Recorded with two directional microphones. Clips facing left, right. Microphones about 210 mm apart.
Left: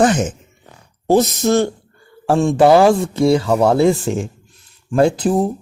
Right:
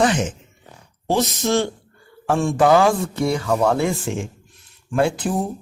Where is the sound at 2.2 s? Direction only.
25° left (ahead or behind).